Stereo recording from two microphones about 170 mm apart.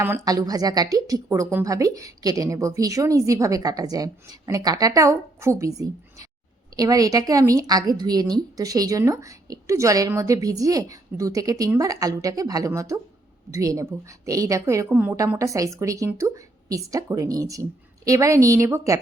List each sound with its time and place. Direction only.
0.3 s a woman's voice: 20° right (ahead or behind)